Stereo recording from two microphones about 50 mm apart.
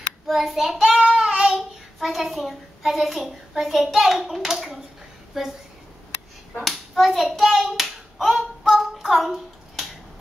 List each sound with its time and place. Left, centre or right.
0.3 s child singing: centre
2.0 s a woman's voice: centre
6.5 s hands: centre